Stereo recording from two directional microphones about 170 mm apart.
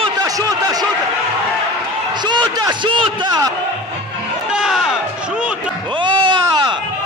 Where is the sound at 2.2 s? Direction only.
25° right (ahead or behind).